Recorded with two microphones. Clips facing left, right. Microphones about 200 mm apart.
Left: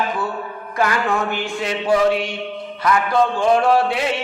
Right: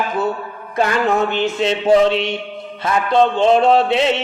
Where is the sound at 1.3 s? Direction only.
25° right (ahead or behind).